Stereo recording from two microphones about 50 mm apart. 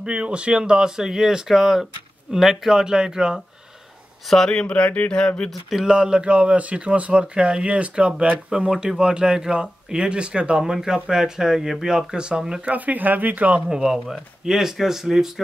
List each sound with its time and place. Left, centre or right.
0.0 s speech: centre
4.3 s speech: centre
4.6 s speech: left
5.5 s a sound: centre
5.9 s speech: centre
10.6 s speech: centre
12.6 s speech: right
13.7 s speech: centre